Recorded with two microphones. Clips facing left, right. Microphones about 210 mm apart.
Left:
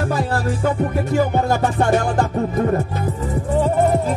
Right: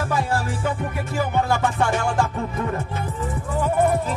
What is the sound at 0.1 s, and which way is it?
Music, 40° left (ahead or behind).